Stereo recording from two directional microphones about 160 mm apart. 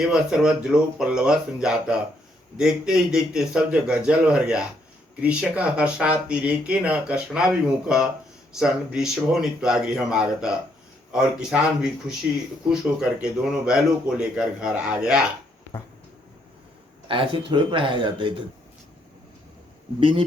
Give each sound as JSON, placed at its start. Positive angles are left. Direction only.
{"t": 0.0, "sound": "speech", "side_deg": -5}
{"t": 17.1, "sound": "speech", "side_deg": -30}
{"t": 20.0, "sound": "speech", "side_deg": -35}